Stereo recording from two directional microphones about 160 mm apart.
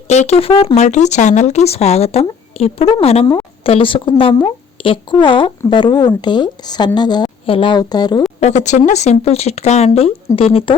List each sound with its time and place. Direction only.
0.1 s a woman's voice: 45° left (ahead or behind); by 8.2 s 25° left (ahead or behind)
8.4 s speech: 45° left (ahead or behind)